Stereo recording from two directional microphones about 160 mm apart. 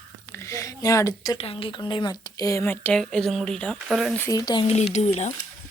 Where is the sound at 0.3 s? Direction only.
15° left (ahead or behind).